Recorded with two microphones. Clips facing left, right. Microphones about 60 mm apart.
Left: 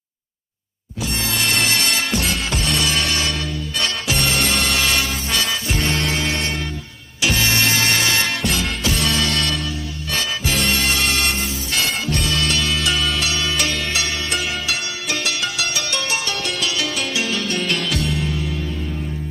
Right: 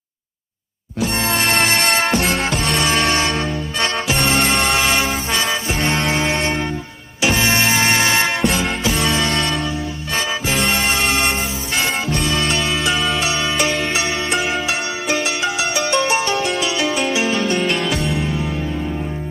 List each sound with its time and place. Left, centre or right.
1.0 s music: right
12.4 s music: right